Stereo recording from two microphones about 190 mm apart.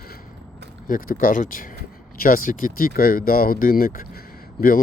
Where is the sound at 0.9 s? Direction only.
45° left (ahead or behind).